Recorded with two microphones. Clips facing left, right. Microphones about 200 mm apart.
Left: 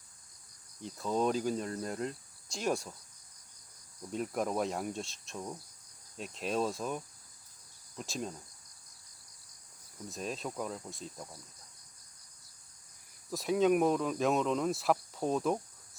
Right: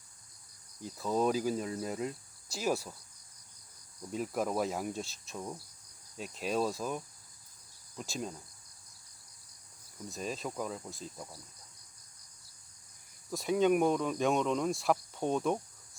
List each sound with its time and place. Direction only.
0.8 s speech: 5° right (ahead or behind)
4.1 s speech: centre (ahead or behind)
10.1 s speech: centre (ahead or behind)
13.3 s speech: centre (ahead or behind)